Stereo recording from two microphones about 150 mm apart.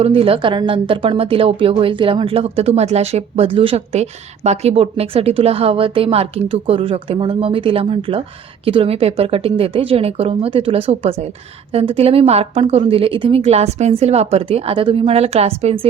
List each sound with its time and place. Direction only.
0.0 s a woman's voice: 40° right (ahead or behind)
13.4 s a woman's voice: 45° right (ahead or behind)